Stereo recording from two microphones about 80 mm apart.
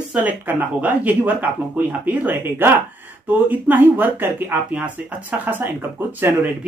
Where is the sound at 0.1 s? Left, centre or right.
Right.